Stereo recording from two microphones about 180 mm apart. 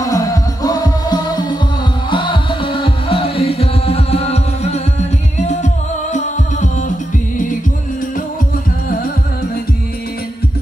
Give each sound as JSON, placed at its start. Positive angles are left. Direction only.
{"t": 0.0, "sound": "music", "side_deg": 20}